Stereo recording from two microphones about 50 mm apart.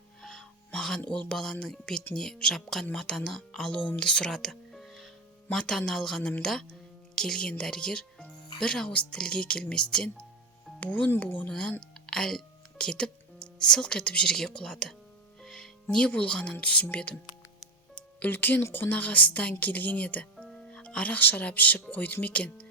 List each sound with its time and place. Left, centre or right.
0.2 s music: centre
1.3 s speech: centre
3.8 s speech: left
4.0 s speech: centre
4.7 s music: centre
6.4 s speech: centre
10.8 s speech: left
11.4 s speech: centre
18.3 s speech: left
18.9 s speech: left